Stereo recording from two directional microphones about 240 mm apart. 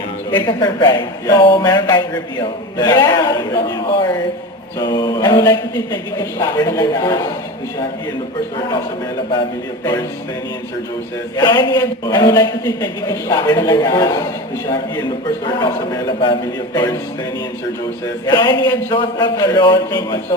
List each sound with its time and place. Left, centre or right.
0.4 s a woman's voice: centre
11.3 s a man's voice: centre
15.4 s a man's voice: centre
18.3 s a man's voice: centre